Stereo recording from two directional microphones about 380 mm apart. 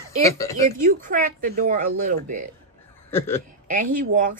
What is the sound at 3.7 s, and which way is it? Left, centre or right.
Speech, right.